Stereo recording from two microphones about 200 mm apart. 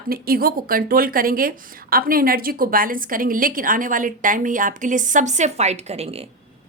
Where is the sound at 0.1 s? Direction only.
50° right (ahead or behind); by 6.3 s 30° right (ahead or behind).